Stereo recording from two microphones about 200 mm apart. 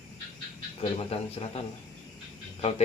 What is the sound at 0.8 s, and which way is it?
Speech, 30° left (ahead or behind).